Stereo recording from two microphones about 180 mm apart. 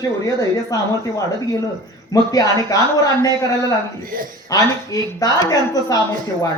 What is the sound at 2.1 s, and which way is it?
Speech, 20° left (ahead or behind).